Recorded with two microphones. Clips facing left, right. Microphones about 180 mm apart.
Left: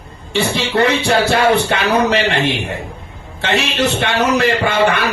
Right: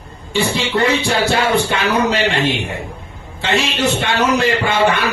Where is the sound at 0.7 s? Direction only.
65° left (ahead or behind).